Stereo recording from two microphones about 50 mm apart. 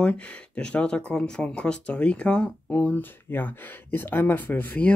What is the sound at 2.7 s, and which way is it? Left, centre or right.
Speech, left.